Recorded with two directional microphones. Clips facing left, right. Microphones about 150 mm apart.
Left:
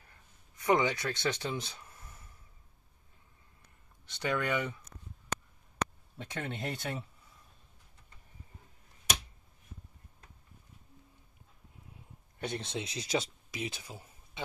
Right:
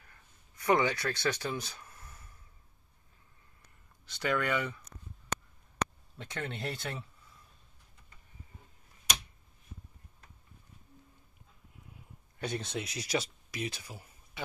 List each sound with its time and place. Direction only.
0.0 s a sound: 20° left (ahead or behind)
4.0 s speech: 20° left (ahead or behind)
6.1 s speech: 15° left (ahead or behind)
12.4 s speech: 25° left (ahead or behind)